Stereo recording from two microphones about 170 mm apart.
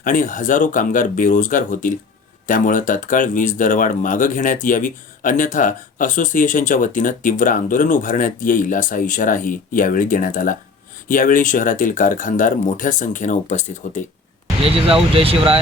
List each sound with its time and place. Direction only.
0.0 s speech: 50° left (ahead or behind)
14.6 s speech: 35° right (ahead or behind)